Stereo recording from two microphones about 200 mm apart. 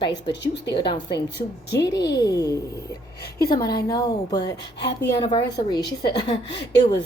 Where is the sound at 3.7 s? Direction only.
20° left (ahead or behind).